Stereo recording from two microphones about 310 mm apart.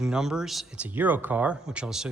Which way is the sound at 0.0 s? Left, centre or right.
Centre.